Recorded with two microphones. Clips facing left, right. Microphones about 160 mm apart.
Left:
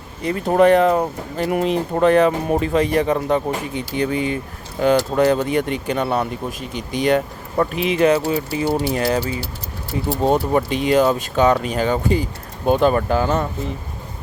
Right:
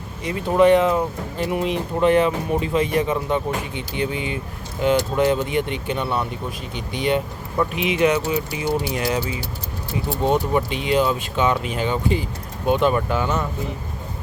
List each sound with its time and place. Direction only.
0.2 s speech: 40° left (ahead or behind)
10.2 s speech: 40° left (ahead or behind)